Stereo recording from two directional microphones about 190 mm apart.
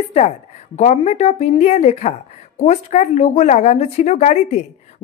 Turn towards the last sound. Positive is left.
turn(degrees=35)  # may be behind; listen again after turning